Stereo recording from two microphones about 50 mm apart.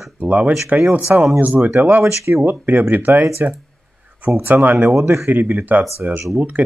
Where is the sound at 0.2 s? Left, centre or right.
Right.